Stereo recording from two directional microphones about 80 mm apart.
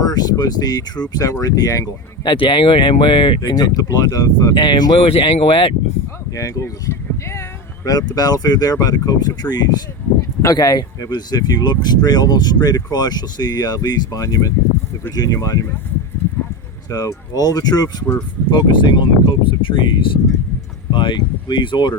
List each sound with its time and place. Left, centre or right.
0.0 s speech: left
2.2 s speech: left
4.5 s speech: left
6.3 s a sound: left
7.9 s speech: left
10.2 s speech: left
16.9 s speech: left
18.5 s speech: left